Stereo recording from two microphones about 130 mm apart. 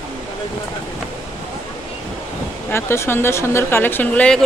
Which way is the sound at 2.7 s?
20° left (ahead or behind).